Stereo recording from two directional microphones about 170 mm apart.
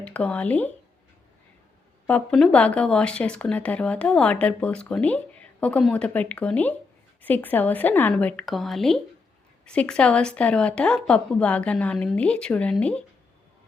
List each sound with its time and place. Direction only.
0.0 s speech: 5° left (ahead or behind)
2.0 s speech: 5° left (ahead or behind)